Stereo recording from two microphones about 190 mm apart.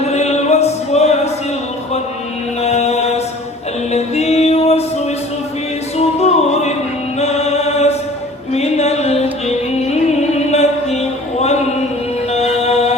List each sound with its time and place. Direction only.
0.0 s music: 35° left (ahead or behind)
2.6 s chant: 35° left (ahead or behind)
3.9 s music: 35° left (ahead or behind)
6.0 s opera: 35° left (ahead or behind)
7.2 s choir: 35° left (ahead or behind)
8.5 s music: 35° left (ahead or behind)